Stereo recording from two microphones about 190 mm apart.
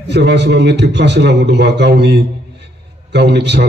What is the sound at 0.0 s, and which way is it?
A man's voice, 65° right (ahead or behind).